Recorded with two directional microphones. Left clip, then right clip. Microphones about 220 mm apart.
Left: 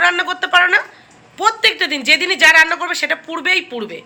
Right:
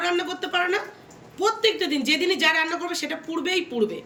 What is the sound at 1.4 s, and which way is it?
A woman's voice, 5° right (ahead or behind).